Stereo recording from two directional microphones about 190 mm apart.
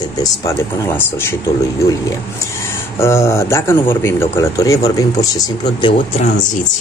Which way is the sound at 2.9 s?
15° left (ahead or behind).